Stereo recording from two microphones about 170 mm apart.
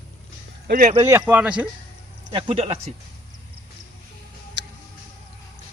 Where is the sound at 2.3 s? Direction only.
30° right (ahead or behind).